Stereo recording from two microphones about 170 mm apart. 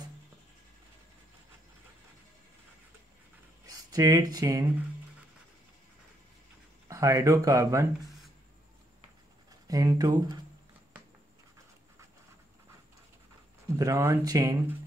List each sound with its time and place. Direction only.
3.6 s speech: 20° right (ahead or behind)
6.9 s speech: 20° right (ahead or behind)
9.5 s speech: 20° right (ahead or behind)
13.7 s speech: 20° right (ahead or behind)